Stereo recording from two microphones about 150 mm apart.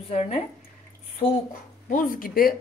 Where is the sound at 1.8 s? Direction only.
70° left (ahead or behind).